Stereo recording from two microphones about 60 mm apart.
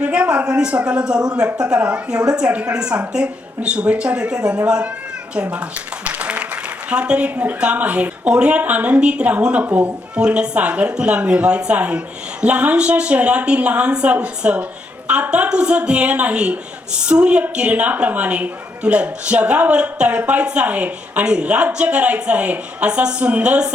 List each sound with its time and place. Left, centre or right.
0.0 s a woman's voice: centre
6.1 s applause: right
6.9 s a woman's voice: centre
10.2 s a woman's voice: centre